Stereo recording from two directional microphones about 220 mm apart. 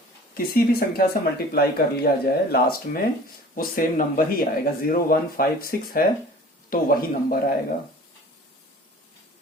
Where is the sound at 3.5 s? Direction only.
40° left (ahead or behind).